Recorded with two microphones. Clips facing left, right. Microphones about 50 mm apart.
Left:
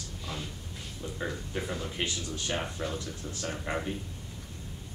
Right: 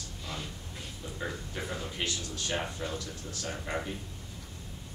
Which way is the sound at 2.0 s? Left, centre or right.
Centre.